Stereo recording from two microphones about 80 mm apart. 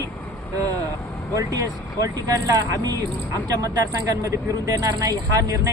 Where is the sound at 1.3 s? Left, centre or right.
Right.